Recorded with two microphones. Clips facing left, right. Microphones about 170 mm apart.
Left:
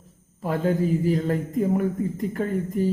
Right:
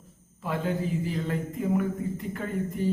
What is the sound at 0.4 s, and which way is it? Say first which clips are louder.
A man's voice: left 6 dB; 45° left (ahead or behind).